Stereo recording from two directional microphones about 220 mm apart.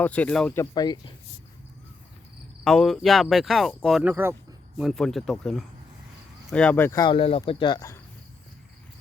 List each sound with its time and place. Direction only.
0.0 s speech: 5° left (ahead or behind)
2.6 s speech: centre (ahead or behind); by 7.9 s 15° left (ahead or behind)